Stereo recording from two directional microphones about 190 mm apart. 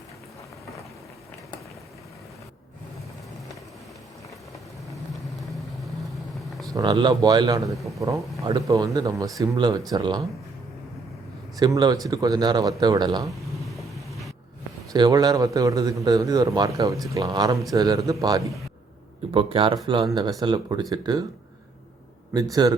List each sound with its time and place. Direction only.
6.7 s a man's voice: 20° right (ahead or behind)
11.6 s a man's voice: 20° right (ahead or behind)
13.9 s music: centre (ahead or behind)
14.9 s a man's voice: 20° right (ahead or behind)
22.6 s a man's voice: 20° right (ahead or behind)